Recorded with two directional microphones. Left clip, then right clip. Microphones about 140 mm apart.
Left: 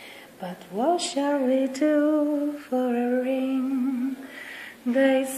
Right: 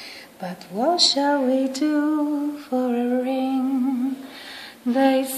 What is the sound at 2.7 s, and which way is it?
Lullaby, 5° right (ahead or behind).